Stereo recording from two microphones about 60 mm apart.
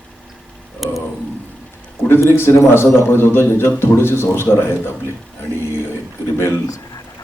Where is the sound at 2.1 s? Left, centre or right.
Left.